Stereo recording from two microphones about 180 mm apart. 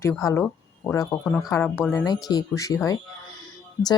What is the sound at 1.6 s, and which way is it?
Speech, 5° right (ahead or behind).